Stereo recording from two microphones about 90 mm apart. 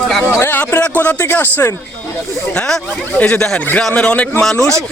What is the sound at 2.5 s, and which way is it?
A man's voice, 10° left (ahead or behind).